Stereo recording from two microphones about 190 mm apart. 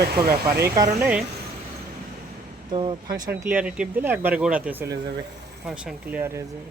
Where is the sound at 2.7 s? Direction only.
25° right (ahead or behind).